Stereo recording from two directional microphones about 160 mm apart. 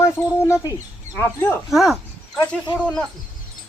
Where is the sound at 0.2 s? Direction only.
15° left (ahead or behind).